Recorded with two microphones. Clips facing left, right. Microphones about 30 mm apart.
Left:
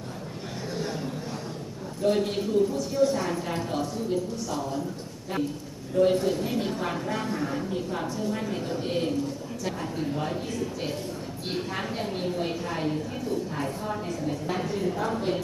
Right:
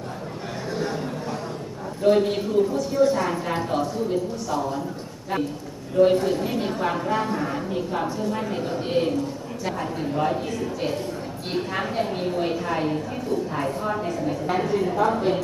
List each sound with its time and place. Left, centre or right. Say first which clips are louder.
0.7 s a sound: right 5 dB; centre
2.0 s a woman's voice: right 5 dB; centre
6.0 s a woman's voice: right 4 dB; centre